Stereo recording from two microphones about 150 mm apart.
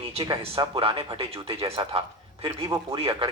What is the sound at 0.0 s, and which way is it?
Speech, 40° right (ahead or behind).